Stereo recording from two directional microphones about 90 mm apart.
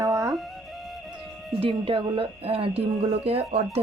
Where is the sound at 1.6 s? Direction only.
80° right.